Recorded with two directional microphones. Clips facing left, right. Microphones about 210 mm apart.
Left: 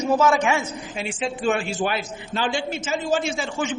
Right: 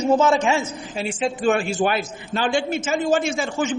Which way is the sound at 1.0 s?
40° right (ahead or behind).